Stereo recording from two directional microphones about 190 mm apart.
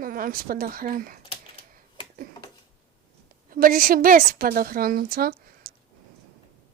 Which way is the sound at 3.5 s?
50° right (ahead or behind).